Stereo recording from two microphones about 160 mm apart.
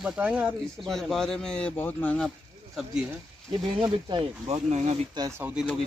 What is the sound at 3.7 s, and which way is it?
Speech, 30° right (ahead or behind).